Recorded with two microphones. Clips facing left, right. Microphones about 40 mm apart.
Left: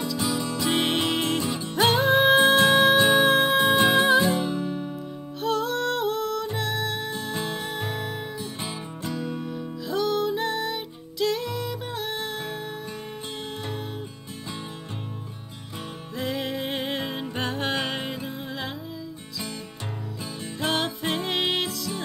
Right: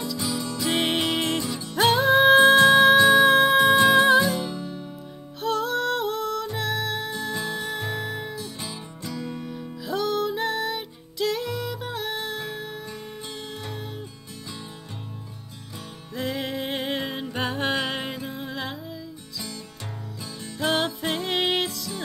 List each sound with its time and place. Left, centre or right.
0.0 s music: centre
1.4 s music: left
1.8 s music: centre
4.3 s music: left
5.4 s music: centre
8.6 s music: left
9.2 s music: centre
16.2 s music: centre
20.6 s music: centre